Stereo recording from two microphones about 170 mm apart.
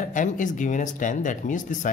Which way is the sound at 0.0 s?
50° left (ahead or behind).